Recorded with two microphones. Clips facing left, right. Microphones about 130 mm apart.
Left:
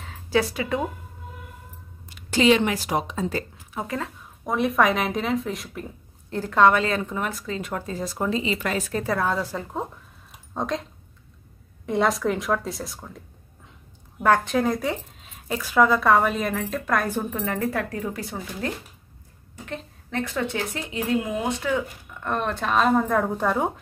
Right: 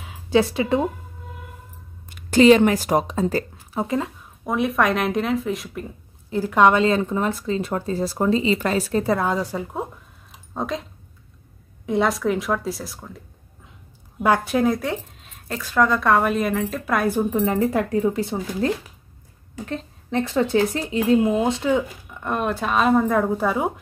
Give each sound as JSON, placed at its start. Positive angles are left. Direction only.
{"t": 0.3, "sound": "speech", "side_deg": -25}
{"t": 2.0, "sound": "speech", "side_deg": -50}
{"t": 3.8, "sound": "speech", "side_deg": -20}
{"t": 4.5, "sound": "speech", "side_deg": 0}
{"t": 10.5, "sound": "speech", "side_deg": -5}
{"t": 14.2, "sound": "speech", "side_deg": -10}
{"t": 17.2, "sound": "speech", "side_deg": -15}
{"t": 20.1, "sound": "a woman's voice", "side_deg": -25}
{"t": 20.5, "sound": "speech", "side_deg": -35}
{"t": 22.2, "sound": "speech", "side_deg": -10}